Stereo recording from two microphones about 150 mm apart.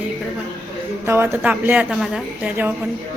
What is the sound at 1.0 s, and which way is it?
A woman's voice, 15° right (ahead or behind).